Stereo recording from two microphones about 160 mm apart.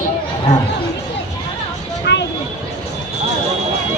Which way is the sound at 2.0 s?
90° left.